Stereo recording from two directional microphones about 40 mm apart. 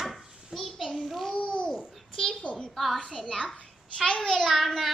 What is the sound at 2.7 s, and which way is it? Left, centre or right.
Child singing, centre.